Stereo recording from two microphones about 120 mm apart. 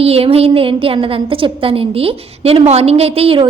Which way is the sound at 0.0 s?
55° right (ahead or behind).